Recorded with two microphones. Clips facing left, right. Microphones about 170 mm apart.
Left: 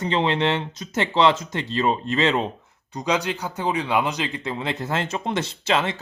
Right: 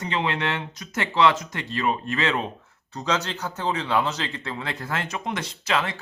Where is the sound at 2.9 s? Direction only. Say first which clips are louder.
Left 3 dB; 15° left (ahead or behind).